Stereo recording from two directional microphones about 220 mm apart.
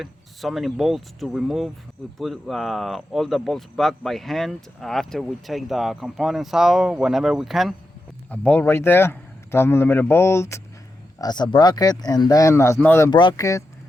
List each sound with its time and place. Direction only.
0.0 s a man's voice: centre (ahead or behind); by 13.7 s 15° left (ahead or behind)